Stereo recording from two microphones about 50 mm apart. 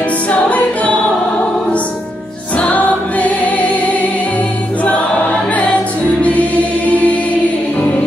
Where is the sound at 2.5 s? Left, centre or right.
Left.